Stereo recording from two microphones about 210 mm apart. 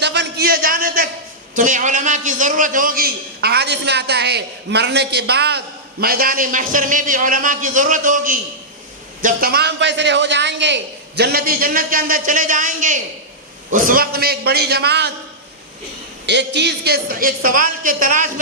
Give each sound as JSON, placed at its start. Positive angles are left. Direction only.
{"t": 0.0, "sound": "a sound", "side_deg": -55}
{"t": 1.5, "sound": "a man's voice", "side_deg": -40}
{"t": 16.2, "sound": "a man's voice", "side_deg": -55}